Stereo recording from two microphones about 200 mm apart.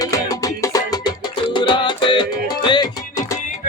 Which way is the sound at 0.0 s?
15° left (ahead or behind).